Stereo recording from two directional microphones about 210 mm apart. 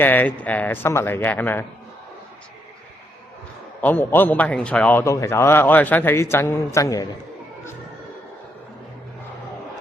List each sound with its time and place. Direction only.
0.0 s a man's voice: 10° left (ahead or behind)
3.8 s a man's voice: 10° left (ahead or behind)